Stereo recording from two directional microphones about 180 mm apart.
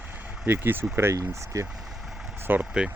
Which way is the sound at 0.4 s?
10° right (ahead or behind).